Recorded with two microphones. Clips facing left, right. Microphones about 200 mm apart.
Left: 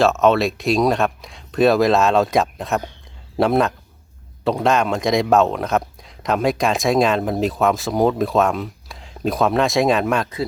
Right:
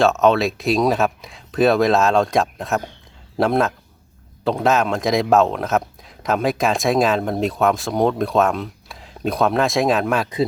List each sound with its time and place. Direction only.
0.0 s speech: centre (ahead or behind)